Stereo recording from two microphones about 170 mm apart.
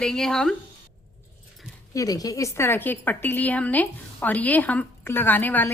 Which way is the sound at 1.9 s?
20° left (ahead or behind).